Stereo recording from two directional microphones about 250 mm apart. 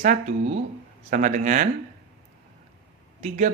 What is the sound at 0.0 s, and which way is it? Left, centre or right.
Speech, right.